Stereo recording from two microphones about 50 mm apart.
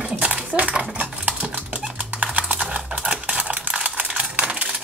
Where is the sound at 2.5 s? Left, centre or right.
Right.